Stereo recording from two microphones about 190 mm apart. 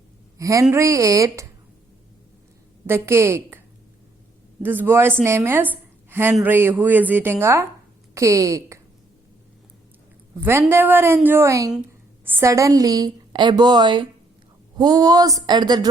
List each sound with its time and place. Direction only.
0.3 s speech: 15° right (ahead or behind)
2.8 s speech: 15° right (ahead or behind)
4.6 s speech: 10° right (ahead or behind)
10.4 s a woman's voice: 15° right (ahead or behind)